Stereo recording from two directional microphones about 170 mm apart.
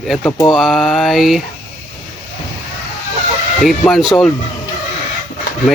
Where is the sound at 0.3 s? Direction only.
15° left (ahead or behind).